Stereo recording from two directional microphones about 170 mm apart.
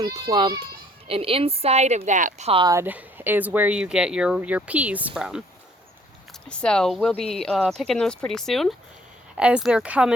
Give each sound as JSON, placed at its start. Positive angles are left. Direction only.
{"t": 0.0, "sound": "a child's voice", "side_deg": -25}
{"t": 2.5, "sound": "a child's voice", "side_deg": -30}
{"t": 2.7, "sound": "speech", "side_deg": -10}
{"t": 6.5, "sound": "speech", "side_deg": 5}